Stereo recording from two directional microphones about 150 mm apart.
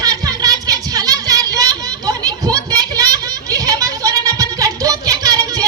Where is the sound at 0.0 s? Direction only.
25° right (ahead or behind).